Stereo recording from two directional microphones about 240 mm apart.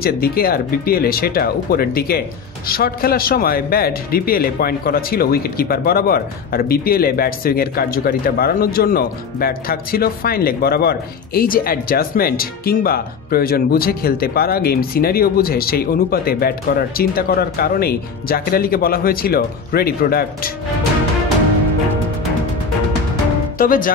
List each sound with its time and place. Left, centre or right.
0.0 s speech: left
23.6 s speech: left